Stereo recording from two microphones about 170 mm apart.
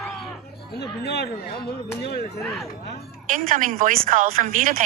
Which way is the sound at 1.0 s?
75° left (ahead or behind).